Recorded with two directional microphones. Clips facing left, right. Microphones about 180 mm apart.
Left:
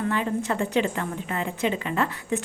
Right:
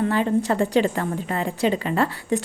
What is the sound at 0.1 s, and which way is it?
A woman's voice, 35° right (ahead or behind).